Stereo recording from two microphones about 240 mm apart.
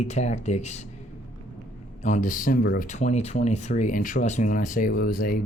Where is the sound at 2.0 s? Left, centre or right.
Left.